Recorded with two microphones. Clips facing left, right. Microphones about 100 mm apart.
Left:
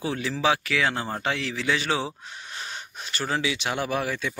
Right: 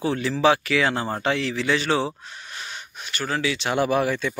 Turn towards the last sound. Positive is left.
turn(degrees=0)  # may be behind; listen again after turning